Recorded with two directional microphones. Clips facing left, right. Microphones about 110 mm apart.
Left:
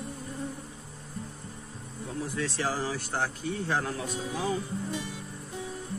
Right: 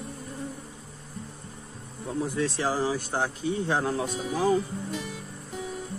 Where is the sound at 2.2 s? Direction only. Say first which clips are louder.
Right 4 dB; 20° right (ahead or behind).